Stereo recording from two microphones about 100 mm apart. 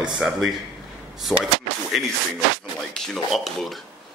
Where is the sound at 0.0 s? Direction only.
5° right (ahead or behind).